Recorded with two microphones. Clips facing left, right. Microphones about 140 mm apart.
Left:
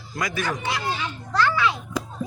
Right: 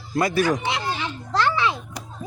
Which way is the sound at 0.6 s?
25° right (ahead or behind).